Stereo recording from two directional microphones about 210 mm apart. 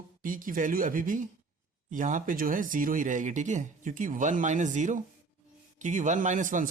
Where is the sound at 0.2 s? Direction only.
40° right (ahead or behind).